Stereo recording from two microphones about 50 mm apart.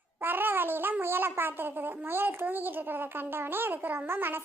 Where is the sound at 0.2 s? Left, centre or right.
Right.